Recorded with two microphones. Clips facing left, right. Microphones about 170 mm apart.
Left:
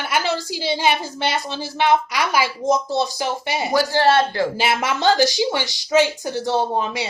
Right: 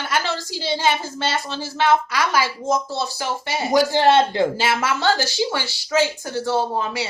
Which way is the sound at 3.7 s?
15° right (ahead or behind).